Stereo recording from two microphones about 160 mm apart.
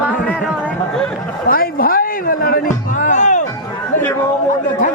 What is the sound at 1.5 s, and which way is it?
Music, 65° left (ahead or behind).